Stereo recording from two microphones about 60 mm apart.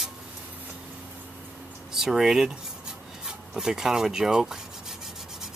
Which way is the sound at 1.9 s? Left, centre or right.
Centre.